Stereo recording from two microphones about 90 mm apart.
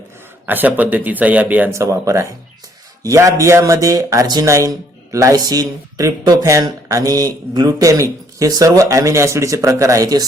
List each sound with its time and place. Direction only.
0.4 s speech: 20° right (ahead or behind)
1.7 s speech: 35° right (ahead or behind)